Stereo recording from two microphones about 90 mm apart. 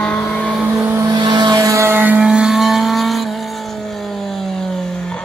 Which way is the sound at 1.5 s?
35° right (ahead or behind).